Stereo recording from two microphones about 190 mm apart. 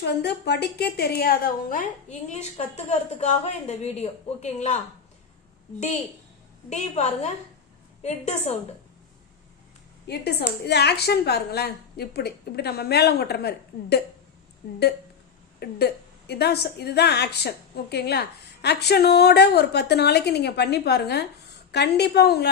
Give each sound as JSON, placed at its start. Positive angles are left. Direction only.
{"t": 0.0, "sound": "a woman's voice", "side_deg": 60}
{"t": 6.7, "sound": "a woman's voice", "side_deg": 35}
{"t": 10.1, "sound": "a woman's voice", "side_deg": 60}
{"t": 14.6, "sound": "a woman's voice", "side_deg": 55}